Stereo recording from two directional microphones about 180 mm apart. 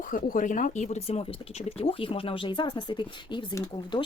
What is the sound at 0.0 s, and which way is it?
Speech, 50° left (ahead or behind).